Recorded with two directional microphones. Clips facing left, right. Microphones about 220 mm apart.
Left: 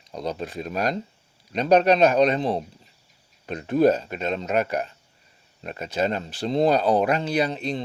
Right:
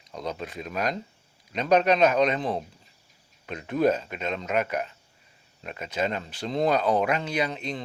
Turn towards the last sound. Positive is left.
turn(degrees=35)  # may be behind; listen again after turning